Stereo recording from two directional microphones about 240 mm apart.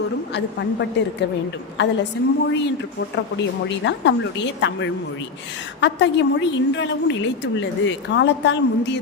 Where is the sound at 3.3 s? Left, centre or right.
Left.